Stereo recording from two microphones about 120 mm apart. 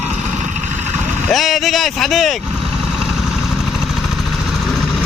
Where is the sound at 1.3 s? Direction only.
Centre (ahead or behind).